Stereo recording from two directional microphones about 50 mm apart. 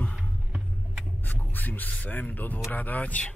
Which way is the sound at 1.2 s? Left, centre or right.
Left.